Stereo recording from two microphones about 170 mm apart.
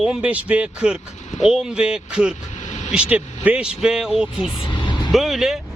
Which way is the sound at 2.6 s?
45° left (ahead or behind).